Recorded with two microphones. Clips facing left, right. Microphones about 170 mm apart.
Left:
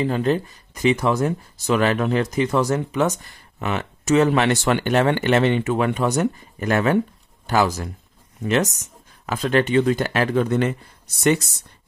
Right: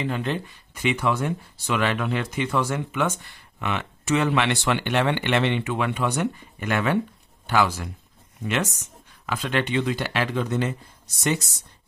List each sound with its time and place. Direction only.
0.0 s speech: 40° left (ahead or behind); by 10.8 s 60° left (ahead or behind)